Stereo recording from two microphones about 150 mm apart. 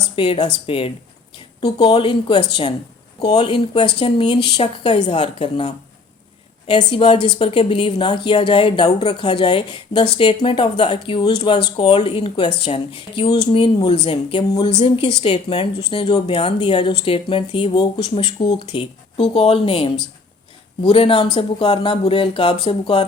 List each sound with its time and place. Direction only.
0.2 s speech: 40° left (ahead or behind)
16.2 s speech: 45° left (ahead or behind)